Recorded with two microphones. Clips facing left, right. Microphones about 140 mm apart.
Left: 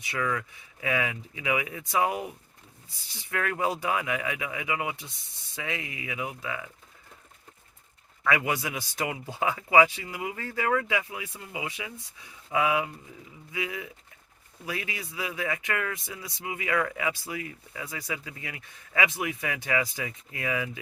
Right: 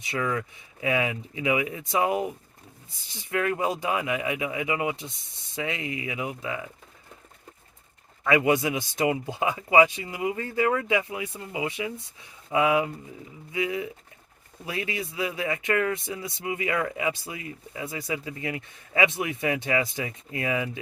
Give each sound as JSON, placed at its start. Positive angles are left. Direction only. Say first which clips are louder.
{"t": 0.0, "sound": "speech", "louder": "right 2 dB", "side_deg": -25}
{"t": 8.2, "sound": "speech", "louder": "right 6 dB", "side_deg": -25}